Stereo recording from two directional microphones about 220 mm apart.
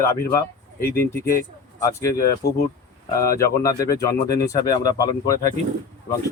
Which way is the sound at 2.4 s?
45° left (ahead or behind).